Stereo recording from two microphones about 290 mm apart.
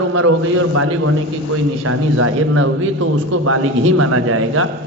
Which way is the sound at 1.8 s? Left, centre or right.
Right.